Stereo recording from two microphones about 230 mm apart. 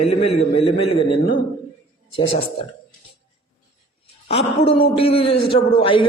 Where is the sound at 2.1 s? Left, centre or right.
Left.